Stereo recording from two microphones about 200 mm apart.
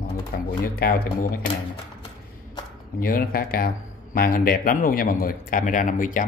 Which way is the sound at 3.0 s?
45° left (ahead or behind).